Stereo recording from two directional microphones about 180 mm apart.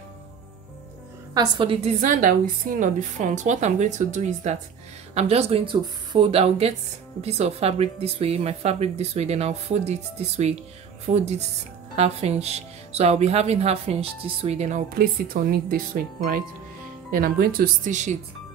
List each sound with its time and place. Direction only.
1.3 s a woman's voice: 25° right (ahead or behind)
2.0 s a woman's voice: 50° right (ahead or behind)
15.0 s a woman's voice: 50° right (ahead or behind)